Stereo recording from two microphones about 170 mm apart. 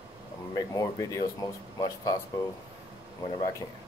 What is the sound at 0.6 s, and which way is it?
Speech, 20° left (ahead or behind).